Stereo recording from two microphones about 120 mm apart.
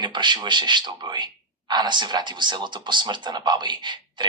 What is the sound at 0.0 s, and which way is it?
A man's voice, 40° right (ahead or behind).